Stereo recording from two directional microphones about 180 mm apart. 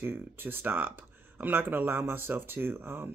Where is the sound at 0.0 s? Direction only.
10° right (ahead or behind).